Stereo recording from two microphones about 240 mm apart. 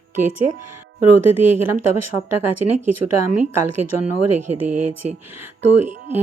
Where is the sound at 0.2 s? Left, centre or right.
Right.